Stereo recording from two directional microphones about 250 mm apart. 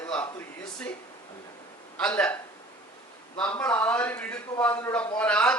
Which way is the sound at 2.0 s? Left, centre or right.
Centre.